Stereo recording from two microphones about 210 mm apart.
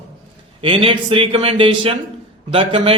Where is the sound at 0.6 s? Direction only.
25° right (ahead or behind).